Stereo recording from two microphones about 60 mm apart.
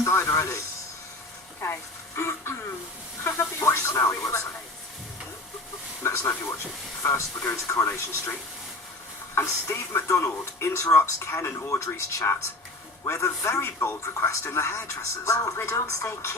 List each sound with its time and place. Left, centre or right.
0.0 s a sound: left
1.6 s a man's voice: left
6.0 s a man's voice: left
9.3 s a man's voice: left